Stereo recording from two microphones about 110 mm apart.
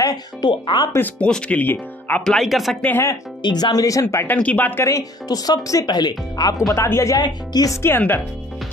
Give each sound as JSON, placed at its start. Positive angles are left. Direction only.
{"t": 0.0, "sound": "speech", "side_deg": 35}
{"t": 0.9, "sound": "speech", "side_deg": 15}
{"t": 2.2, "sound": "speech", "side_deg": 0}
{"t": 2.8, "sound": "speech", "side_deg": 15}
{"t": 3.4, "sound": "a woman's voice", "side_deg": 40}
{"t": 4.8, "sound": "speech", "side_deg": 30}
{"t": 6.7, "sound": "a woman's voice", "side_deg": 25}
{"t": 7.2, "sound": "speech", "side_deg": 40}